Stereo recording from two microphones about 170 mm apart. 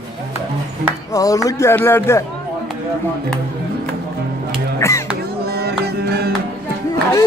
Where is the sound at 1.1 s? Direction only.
20° left (ahead or behind).